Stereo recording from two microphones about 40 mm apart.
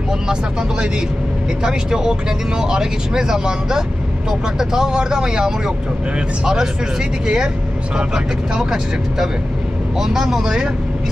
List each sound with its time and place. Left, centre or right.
0.3 s speech: right
9.9 s speech: centre